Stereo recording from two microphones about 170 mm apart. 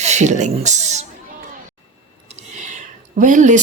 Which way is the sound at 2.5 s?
45° right (ahead or behind).